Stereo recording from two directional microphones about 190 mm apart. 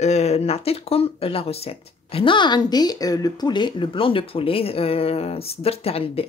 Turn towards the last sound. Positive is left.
turn(degrees=30)  # may be behind; listen again after turning